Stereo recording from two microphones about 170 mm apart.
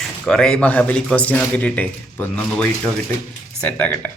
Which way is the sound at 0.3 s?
5° left (ahead or behind).